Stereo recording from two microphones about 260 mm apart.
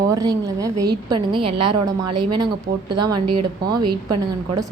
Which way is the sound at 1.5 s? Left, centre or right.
Right.